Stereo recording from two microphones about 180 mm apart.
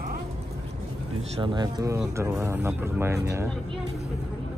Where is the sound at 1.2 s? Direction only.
30° right (ahead or behind).